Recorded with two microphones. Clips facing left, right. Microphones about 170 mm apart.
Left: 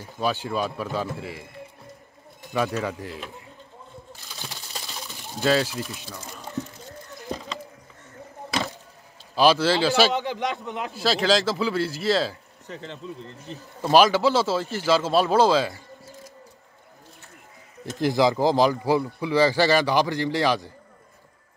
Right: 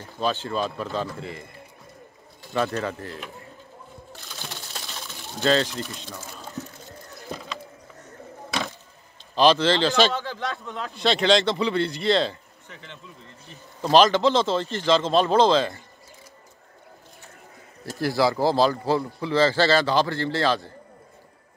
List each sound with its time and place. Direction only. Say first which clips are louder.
0.0 s speech: even; 10° left (ahead or behind)
2.5 s speech: even; 10° left (ahead or behind)
4.4 s a sound: even; 5° left (ahead or behind)
9.3 s speech: even; 10° left (ahead or behind)
10.9 s a man's voice: right 2 dB; 5° left (ahead or behind)
12.6 s speech: left 9 dB; 35° left (ahead or behind)
13.8 s speech: even; 10° left (ahead or behind)
17.9 s speech: left 2 dB; 20° left (ahead or behind)